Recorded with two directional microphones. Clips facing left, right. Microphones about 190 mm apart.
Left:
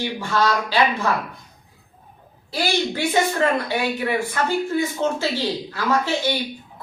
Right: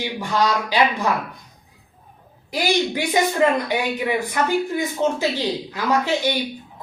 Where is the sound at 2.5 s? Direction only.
15° right (ahead or behind).